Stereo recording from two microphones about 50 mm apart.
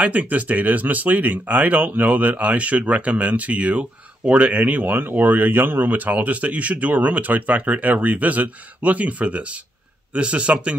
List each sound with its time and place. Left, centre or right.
0.0 s a man's voice: right